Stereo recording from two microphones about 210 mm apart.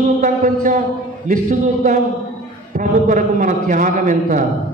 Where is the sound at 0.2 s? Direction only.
40° right (ahead or behind).